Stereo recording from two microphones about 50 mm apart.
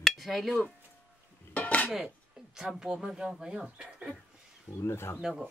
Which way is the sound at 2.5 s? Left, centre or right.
Centre.